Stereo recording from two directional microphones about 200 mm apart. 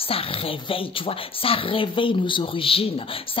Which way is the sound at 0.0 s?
30° left (ahead or behind).